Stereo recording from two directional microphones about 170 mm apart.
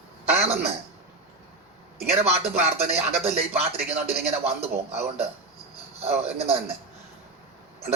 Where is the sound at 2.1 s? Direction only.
40° right (ahead or behind).